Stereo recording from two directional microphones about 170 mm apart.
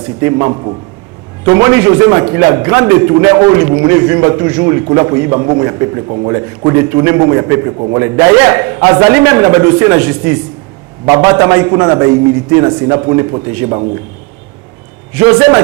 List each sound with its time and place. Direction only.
0.2 s a man's voice: 20° right (ahead or behind)
15.1 s a man's voice: 15° right (ahead or behind)